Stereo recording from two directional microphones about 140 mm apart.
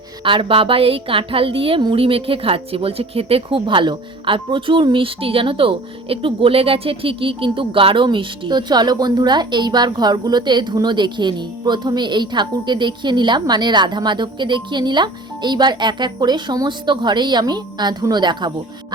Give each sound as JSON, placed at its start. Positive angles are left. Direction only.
{"t": 0.3, "sound": "a woman's voice", "side_deg": -40}